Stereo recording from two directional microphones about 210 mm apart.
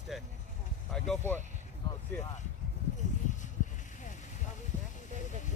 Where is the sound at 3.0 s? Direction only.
35° left (ahead or behind).